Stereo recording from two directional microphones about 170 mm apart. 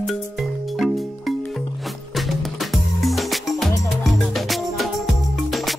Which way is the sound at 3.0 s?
Centre (ahead or behind).